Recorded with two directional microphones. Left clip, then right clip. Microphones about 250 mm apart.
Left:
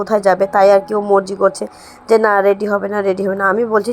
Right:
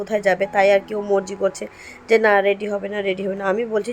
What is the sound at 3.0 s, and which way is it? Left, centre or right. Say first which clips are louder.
Speech: left 6 dB; centre.